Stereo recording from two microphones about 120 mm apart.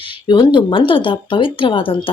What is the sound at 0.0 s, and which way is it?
Speech, 40° left (ahead or behind).